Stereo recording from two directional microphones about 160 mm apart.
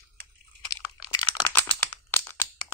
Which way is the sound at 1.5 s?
15° left (ahead or behind).